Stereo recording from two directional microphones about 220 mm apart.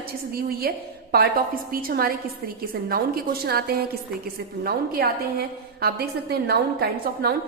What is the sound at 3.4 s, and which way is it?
A woman's voice, 45° right (ahead or behind).